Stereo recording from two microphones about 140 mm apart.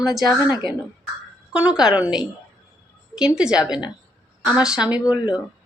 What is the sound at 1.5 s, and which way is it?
A woman's voice, 5° right (ahead or behind).